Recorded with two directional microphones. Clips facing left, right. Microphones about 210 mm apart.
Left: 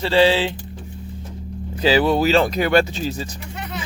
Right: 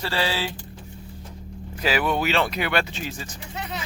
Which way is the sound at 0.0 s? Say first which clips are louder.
Left 10 dB; 25° left (ahead or behind).